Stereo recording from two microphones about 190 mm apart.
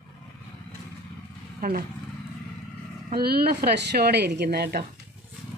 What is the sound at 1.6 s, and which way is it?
Speech, 50° right (ahead or behind).